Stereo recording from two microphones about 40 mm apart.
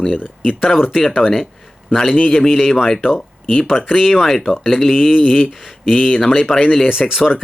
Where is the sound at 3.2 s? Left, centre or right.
Centre.